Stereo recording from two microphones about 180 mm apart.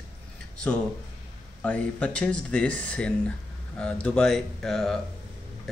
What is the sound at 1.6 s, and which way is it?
Speech, 5° left (ahead or behind).